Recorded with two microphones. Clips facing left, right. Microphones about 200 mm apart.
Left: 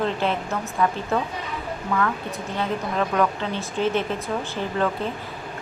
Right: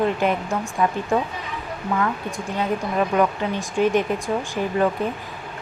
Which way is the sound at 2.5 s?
15° right (ahead or behind).